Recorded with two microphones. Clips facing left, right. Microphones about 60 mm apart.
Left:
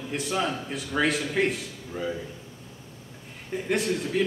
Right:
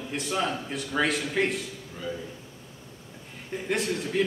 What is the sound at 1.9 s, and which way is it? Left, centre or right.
Speech, centre.